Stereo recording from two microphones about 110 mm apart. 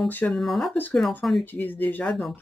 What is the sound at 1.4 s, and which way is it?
Speech, 15° left (ahead or behind).